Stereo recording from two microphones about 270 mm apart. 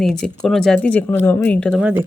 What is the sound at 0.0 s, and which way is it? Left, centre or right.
Speech, centre.